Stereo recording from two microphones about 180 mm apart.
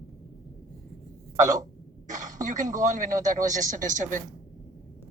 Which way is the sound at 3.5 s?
45° right (ahead or behind).